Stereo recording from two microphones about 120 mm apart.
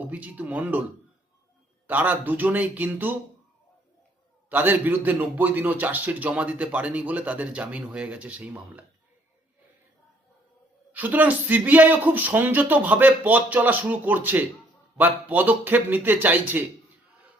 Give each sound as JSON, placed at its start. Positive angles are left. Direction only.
{"t": 0.0, "sound": "a man's voice", "side_deg": -10}
{"t": 1.9, "sound": "a man's voice", "side_deg": -15}
{"t": 4.4, "sound": "a man's voice", "side_deg": -15}
{"t": 10.9, "sound": "a man's voice", "side_deg": -15}